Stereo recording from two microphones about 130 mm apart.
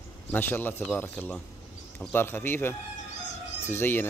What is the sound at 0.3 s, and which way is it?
Speech, 15° left (ahead or behind).